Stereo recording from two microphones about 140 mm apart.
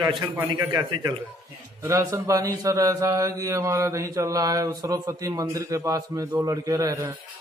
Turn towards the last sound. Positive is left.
turn(degrees=-25)  # may be behind; listen again after turning